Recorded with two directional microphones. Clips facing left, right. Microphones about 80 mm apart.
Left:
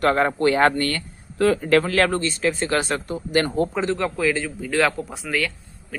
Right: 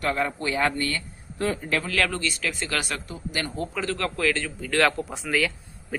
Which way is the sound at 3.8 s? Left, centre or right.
Centre.